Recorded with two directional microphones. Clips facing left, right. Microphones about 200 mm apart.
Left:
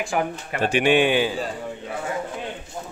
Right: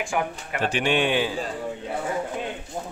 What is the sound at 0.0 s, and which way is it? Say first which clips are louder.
Speech: left 2 dB; 35° left (ahead or behind).